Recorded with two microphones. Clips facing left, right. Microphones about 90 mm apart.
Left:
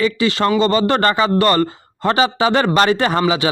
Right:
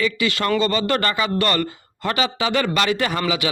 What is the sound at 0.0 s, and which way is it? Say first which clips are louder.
A man's voice: left 5 dB; 30° left (ahead or behind).